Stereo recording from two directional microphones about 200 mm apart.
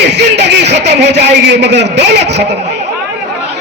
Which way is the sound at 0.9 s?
60° right (ahead or behind).